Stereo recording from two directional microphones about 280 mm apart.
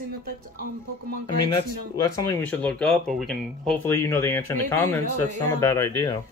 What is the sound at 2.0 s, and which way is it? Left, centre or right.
Speech, centre.